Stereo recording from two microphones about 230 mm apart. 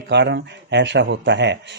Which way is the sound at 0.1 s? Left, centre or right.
Right.